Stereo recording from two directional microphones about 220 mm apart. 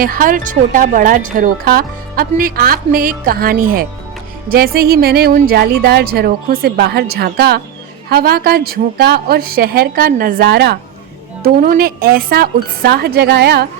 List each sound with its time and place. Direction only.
0.0 s speech: 40° right (ahead or behind)